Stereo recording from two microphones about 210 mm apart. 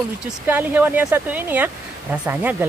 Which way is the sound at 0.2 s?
10° right (ahead or behind).